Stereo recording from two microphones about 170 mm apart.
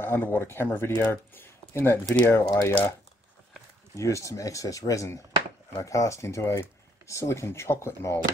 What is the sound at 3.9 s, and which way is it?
Speech, 15° left (ahead or behind).